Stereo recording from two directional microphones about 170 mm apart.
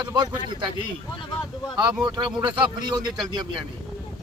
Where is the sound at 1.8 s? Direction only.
25° right (ahead or behind).